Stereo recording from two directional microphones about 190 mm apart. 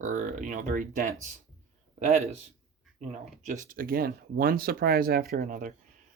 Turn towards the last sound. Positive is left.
turn(degrees=-45)  # may be behind; listen again after turning